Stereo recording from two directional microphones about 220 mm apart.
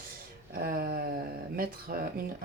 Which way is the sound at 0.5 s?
45° right (ahead or behind).